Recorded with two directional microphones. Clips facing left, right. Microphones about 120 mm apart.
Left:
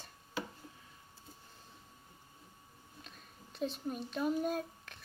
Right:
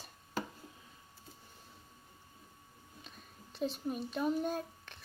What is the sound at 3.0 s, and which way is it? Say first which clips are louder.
Speech: right 1 dB; centre (ahead or behind).